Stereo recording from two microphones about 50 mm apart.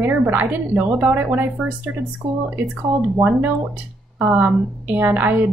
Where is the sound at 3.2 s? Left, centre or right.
Right.